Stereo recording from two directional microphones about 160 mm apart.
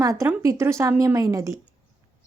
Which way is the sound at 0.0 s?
20° right (ahead or behind).